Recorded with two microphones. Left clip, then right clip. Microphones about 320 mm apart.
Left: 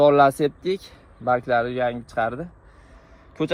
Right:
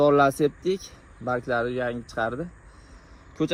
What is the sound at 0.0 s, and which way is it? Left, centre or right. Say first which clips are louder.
Speech: left 4 dB; left.